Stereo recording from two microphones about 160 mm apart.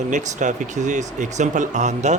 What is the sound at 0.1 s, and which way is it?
Speech, 50° right (ahead or behind).